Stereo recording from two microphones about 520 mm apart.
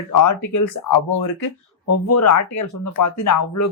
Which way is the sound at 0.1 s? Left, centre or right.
Left.